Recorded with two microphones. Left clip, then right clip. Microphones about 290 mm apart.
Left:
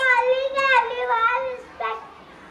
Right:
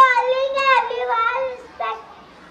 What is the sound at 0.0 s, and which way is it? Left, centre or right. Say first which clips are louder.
Children playing: right 4 dB; right.